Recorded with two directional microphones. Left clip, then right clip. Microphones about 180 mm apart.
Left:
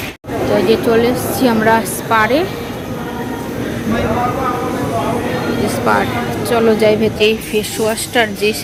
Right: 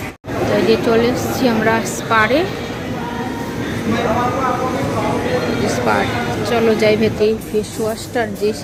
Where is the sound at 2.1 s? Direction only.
5° left (ahead or behind).